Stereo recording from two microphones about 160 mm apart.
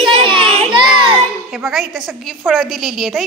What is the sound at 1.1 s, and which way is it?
A woman's voice, 5° right (ahead or behind).